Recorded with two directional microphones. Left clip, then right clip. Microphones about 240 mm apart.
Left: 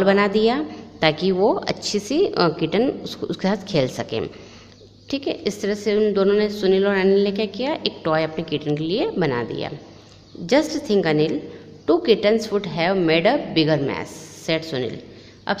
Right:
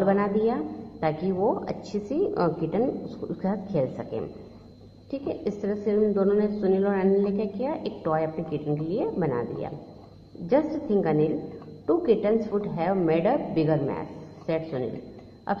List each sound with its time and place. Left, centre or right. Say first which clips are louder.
0.0 s a woman's voice: left 6 dB; left
1.9 s a woman's voice: left 6 dB; left
5.1 s a woman's voice: left 6 dB; left